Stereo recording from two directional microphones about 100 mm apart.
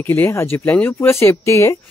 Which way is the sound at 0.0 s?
25° left (ahead or behind).